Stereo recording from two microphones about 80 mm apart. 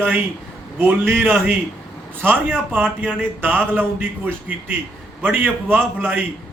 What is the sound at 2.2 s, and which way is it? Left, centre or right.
A man's voice, right.